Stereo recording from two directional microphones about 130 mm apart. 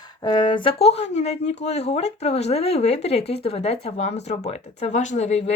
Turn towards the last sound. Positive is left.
turn(degrees=60)  # may be behind; listen again after turning